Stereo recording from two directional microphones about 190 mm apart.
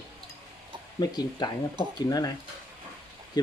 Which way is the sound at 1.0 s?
20° left (ahead or behind).